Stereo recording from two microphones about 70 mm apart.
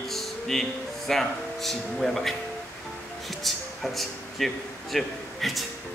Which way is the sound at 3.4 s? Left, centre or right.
Centre.